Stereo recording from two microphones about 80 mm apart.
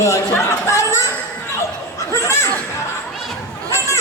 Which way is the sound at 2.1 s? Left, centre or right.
Left.